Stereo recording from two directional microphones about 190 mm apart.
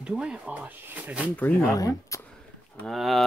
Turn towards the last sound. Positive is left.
turn(degrees=0)  # may be behind; listen again after turning